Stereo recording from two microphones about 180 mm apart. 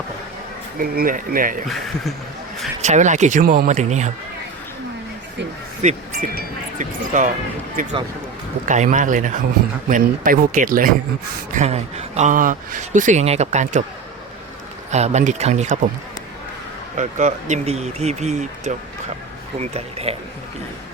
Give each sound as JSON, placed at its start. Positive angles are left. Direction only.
{"t": 0.8, "sound": "speech", "side_deg": -50}
{"t": 1.6, "sound": "speech", "side_deg": 0}
{"t": 2.8, "sound": "speech", "side_deg": -40}
{"t": 3.7, "sound": "speech", "side_deg": -40}
{"t": 5.8, "sound": "speech", "side_deg": -45}
{"t": 11.5, "sound": "speech", "side_deg": -40}
{"t": 14.9, "sound": "speech", "side_deg": -40}
{"t": 17.0, "sound": "speech", "side_deg": -45}